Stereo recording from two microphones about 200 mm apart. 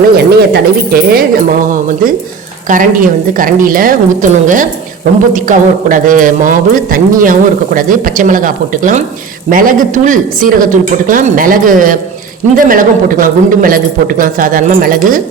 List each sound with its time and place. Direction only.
0.2 s speech: 50° right (ahead or behind)